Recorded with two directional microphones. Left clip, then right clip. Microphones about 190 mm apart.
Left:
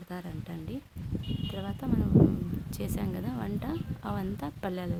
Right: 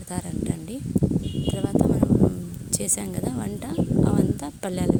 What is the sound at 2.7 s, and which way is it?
Speech, 25° right (ahead or behind).